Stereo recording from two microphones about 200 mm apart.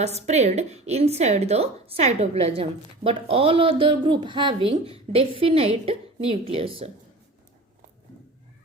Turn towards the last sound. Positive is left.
turn(degrees=-30)  # may be behind; listen again after turning